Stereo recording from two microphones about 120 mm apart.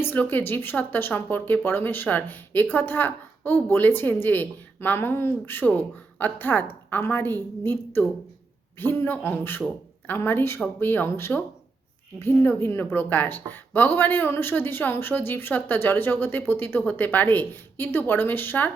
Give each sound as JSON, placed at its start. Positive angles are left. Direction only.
{"t": 0.0, "sound": "a woman's voice", "side_deg": 15}